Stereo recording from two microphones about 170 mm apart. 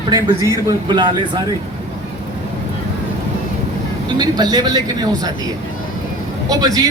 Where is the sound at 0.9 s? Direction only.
25° right (ahead or behind).